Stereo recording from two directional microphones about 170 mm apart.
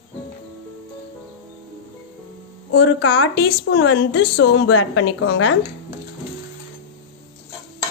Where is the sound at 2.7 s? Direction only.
75° left (ahead or behind).